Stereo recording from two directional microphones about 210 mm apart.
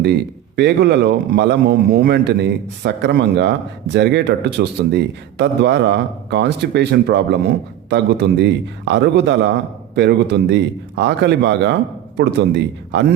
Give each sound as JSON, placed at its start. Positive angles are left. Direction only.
{"t": 0.0, "sound": "a man's voice", "side_deg": -55}